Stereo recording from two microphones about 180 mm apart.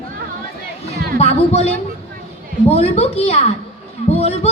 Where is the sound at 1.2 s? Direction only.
35° left (ahead or behind).